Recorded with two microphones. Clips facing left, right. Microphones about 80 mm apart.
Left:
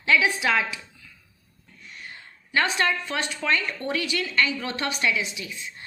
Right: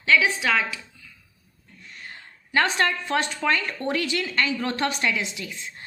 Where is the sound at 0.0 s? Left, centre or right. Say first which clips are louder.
Right 1 dB; centre.